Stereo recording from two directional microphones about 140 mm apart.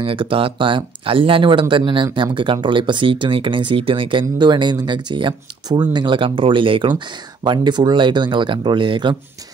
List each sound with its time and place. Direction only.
0.0 s speech: 40° right (ahead or behind)